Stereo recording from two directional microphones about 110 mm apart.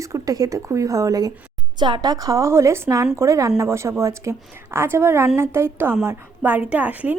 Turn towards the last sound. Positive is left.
turn(degrees=-15)  # may be behind; listen again after turning